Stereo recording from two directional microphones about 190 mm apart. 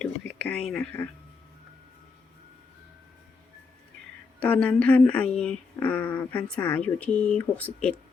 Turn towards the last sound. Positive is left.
turn(degrees=5)  # may be behind; listen again after turning